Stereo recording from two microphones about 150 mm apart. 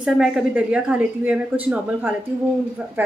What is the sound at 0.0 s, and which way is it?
A woman's voice, 5° right (ahead or behind).